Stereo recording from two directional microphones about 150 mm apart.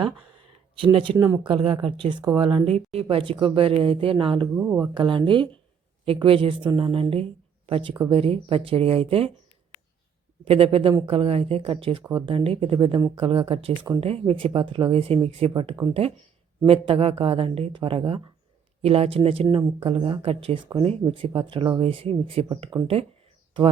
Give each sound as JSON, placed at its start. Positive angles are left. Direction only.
{"t": 0.0, "sound": "a sound", "side_deg": -35}
{"t": 1.1, "sound": "speech", "side_deg": -15}
{"t": 1.5, "sound": "speech", "side_deg": -35}
{"t": 4.5, "sound": "speech", "side_deg": -10}
{"t": 4.9, "sound": "speech", "side_deg": -35}
{"t": 10.4, "sound": "speech", "side_deg": -40}